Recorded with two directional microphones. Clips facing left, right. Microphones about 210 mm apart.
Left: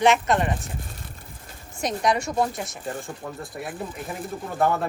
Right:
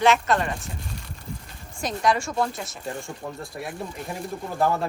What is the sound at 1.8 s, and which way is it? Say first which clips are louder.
Speech: even; 20° left (ahead or behind).